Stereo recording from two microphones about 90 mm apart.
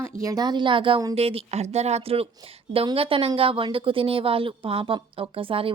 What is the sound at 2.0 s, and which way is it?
A woman's voice, 90° right.